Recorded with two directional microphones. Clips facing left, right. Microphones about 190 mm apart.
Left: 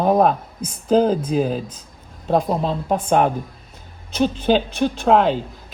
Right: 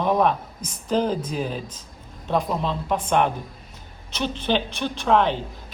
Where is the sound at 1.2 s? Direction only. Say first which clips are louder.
Left 7 dB; 45° left (ahead or behind).